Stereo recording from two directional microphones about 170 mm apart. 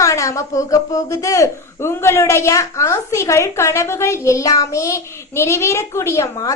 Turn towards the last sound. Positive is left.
turn(degrees=15)  # may be behind; listen again after turning